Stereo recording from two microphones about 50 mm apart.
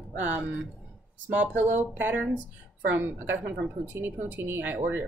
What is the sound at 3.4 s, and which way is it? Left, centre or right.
Speech, right.